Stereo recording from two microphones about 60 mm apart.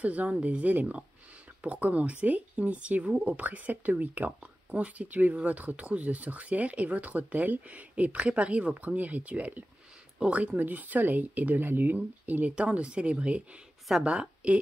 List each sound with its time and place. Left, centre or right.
0.0 s speech: right
3.3 s speech: right